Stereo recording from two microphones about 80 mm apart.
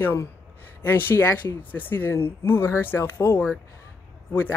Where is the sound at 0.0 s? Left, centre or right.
Left.